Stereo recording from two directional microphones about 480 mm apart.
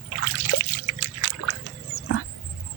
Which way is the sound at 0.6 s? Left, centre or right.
Left.